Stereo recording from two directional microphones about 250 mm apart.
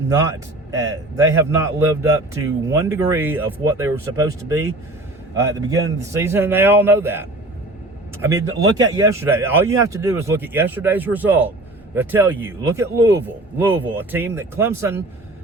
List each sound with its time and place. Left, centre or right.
0.8 s a man's voice: centre